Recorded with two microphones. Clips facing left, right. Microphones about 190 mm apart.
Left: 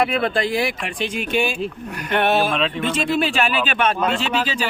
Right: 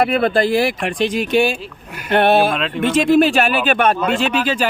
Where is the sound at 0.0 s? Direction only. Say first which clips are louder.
Right 4 dB; 35° right (ahead or behind).